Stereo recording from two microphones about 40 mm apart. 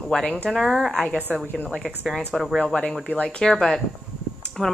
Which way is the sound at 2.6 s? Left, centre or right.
Left.